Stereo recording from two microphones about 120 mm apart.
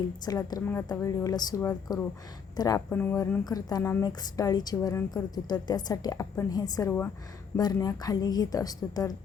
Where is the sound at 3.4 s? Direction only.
30° left (ahead or behind).